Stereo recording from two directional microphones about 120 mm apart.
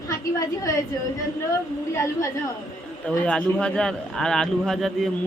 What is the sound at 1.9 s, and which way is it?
Speech, 25° left (ahead or behind).